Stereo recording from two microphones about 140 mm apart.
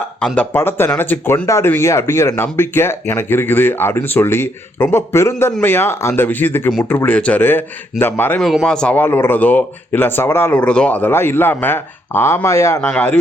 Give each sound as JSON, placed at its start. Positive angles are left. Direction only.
{"t": 0.3, "sound": "speech", "side_deg": 15}
{"t": 8.4, "sound": "speech", "side_deg": 0}